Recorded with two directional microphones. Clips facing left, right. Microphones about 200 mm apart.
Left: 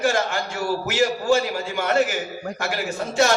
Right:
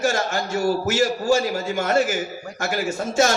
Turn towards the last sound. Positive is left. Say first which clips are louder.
# right 1 dB
turn(degrees=-45)  # may be behind; listen again after turning